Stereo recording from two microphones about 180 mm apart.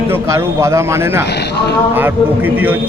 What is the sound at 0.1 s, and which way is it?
A man's voice, 15° right (ahead or behind).